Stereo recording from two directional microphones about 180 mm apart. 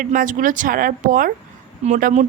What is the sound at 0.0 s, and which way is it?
Speech, 45° right (ahead or behind).